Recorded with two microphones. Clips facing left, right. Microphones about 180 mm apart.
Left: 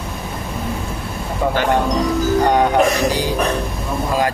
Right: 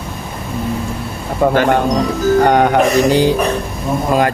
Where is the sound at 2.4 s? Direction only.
65° right (ahead or behind).